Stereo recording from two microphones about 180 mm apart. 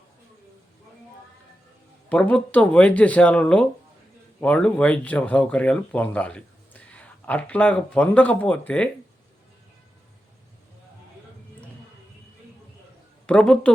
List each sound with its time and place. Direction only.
2.0 s speech: 5° left (ahead or behind)
13.2 s speech: 5° left (ahead or behind)